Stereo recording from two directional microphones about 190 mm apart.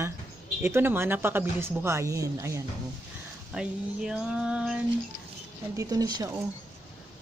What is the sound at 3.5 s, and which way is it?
Speech, 5° right (ahead or behind).